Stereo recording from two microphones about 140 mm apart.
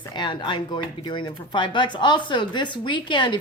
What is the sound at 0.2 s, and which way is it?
Speech, 35° left (ahead or behind).